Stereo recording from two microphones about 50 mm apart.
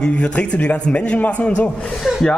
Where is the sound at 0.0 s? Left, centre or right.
Left.